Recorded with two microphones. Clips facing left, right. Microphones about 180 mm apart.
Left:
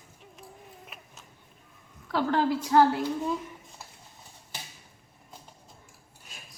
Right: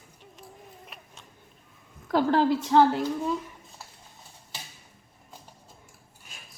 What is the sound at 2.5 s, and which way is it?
Speech, centre (ahead or behind).